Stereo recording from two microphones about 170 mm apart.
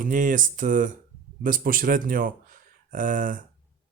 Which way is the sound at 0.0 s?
50° right (ahead or behind).